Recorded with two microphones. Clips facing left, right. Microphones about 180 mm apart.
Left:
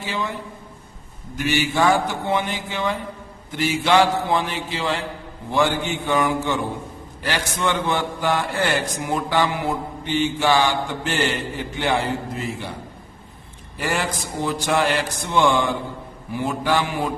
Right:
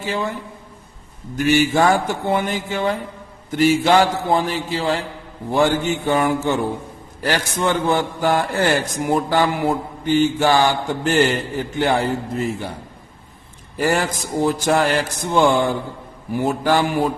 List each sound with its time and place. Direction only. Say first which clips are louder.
0.0 s a man's voice: right 4 dB; 45° right (ahead or behind)
1.4 s a man's voice: right 5 dB; 45° right (ahead or behind)
13.7 s a man's voice: right 5 dB; 45° right (ahead or behind)